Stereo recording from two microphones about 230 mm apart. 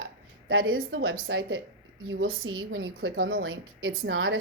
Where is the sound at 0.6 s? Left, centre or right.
Right.